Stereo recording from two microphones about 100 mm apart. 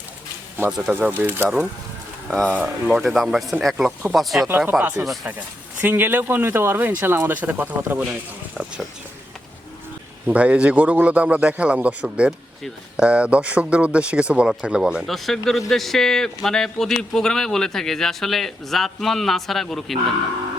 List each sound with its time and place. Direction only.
0.8 s speech: 15° right (ahead or behind)
2.2 s speech: 5° left (ahead or behind)
2.5 s speech: 15° right (ahead or behind)
2.9 s speech: centre (ahead or behind)
4.4 s speech: 20° right (ahead or behind)
8.5 s speech: 5° right (ahead or behind)
10.2 s speech: 10° right (ahead or behind)